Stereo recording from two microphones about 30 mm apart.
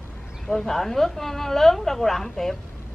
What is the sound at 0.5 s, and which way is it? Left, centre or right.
A woman's voice, centre.